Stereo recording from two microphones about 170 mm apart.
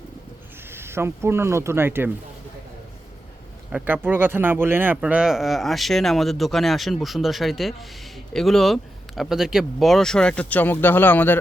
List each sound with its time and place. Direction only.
0.7 s speech: 15° right (ahead or behind)
3.7 s speech: 5° right (ahead or behind); by 11.3 s 10° left (ahead or behind)